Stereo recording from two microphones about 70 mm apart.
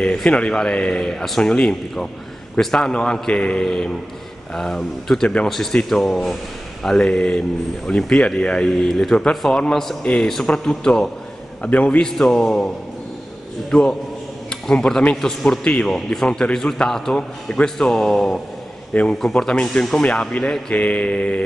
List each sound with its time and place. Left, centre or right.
0.0 s a man's voice: centre
11.6 s a man's voice: centre
12.0 s a man's voice: centre